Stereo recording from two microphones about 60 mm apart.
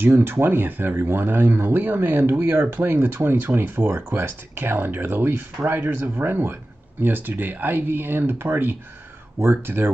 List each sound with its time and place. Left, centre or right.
0.0 s speech: right